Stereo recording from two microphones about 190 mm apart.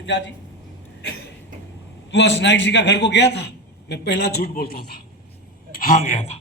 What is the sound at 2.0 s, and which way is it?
A man's voice, 70° left (ahead or behind).